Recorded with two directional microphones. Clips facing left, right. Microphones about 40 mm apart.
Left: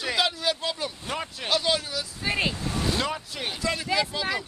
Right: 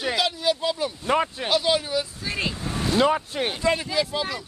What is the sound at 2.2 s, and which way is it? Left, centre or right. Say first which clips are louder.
Speech: left 2 dB; centre.